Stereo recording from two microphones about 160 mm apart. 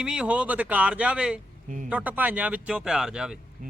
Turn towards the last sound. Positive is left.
turn(degrees=-5)  # may be behind; listen again after turning